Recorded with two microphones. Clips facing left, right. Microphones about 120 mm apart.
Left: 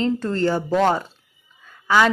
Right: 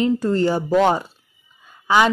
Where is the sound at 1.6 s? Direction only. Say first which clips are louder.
Right 1 dB; 20° right (ahead or behind).